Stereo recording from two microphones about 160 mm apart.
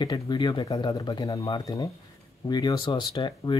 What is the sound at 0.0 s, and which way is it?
Speech, 25° left (ahead or behind).